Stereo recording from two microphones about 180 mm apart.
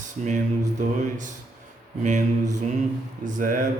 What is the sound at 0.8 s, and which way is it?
Mantra, 45° right (ahead or behind).